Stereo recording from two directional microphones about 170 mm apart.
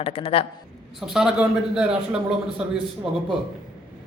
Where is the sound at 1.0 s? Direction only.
5° right (ahead or behind).